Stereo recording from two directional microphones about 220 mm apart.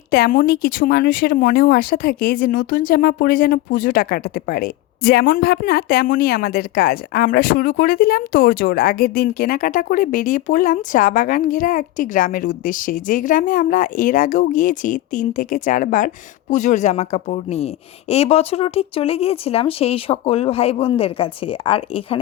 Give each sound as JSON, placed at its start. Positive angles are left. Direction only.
{"t": 0.1, "sound": "speech", "side_deg": 40}